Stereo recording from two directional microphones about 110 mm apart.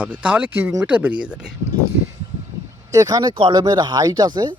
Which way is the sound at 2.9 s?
30° right (ahead or behind).